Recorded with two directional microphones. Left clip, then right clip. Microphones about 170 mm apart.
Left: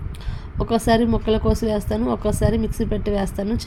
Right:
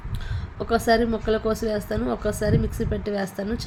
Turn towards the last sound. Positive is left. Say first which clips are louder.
# left 4 dB
turn(degrees=15)  # may be behind; listen again after turning